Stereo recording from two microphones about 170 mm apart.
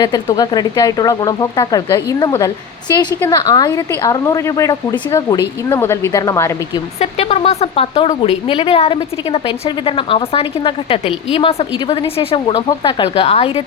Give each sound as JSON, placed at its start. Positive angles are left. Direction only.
{"t": 0.0, "sound": "a woman's voice", "side_deg": 25}
{"t": 7.0, "sound": "a woman's voice", "side_deg": 35}